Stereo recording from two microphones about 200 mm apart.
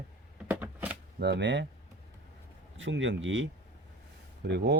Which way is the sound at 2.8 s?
70° right (ahead or behind).